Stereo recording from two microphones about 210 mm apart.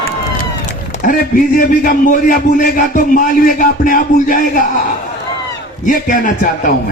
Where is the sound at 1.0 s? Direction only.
40° left (ahead or behind).